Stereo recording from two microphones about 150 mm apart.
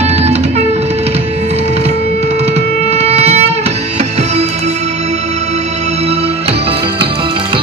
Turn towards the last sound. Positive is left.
turn(degrees=-35)  # may be behind; listen again after turning